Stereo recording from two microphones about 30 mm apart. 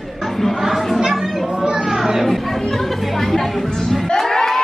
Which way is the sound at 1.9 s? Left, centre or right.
Centre.